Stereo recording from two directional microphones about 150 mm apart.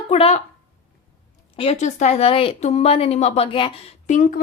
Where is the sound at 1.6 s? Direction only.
45° left (ahead or behind).